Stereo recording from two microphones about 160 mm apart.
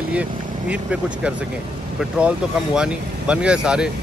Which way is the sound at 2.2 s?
5° right (ahead or behind).